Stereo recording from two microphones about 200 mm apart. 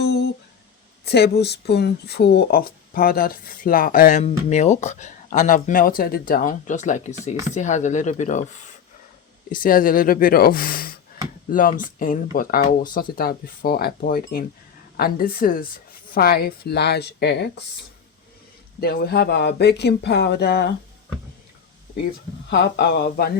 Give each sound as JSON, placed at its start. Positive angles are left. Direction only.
{"t": 0.0, "sound": "a sound", "side_deg": 55}
{"t": 1.0, "sound": "speech", "side_deg": 55}
{"t": 18.8, "sound": "speech", "side_deg": 50}
{"t": 22.4, "sound": "speech", "side_deg": 55}